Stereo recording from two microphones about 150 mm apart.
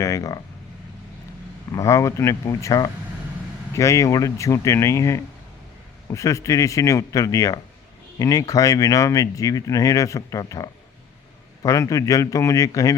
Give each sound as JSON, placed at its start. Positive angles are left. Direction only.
{"t": 0.0, "sound": "speech", "side_deg": 20}
{"t": 1.7, "sound": "speech", "side_deg": 20}